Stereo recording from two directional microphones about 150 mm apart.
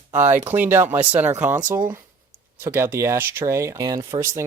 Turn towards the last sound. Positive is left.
turn(degrees=-20)  # may be behind; listen again after turning